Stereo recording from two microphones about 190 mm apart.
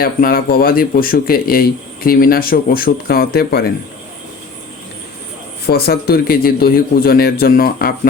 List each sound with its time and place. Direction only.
0.0 s speech: 50° left (ahead or behind)
5.6 s speech: 55° left (ahead or behind)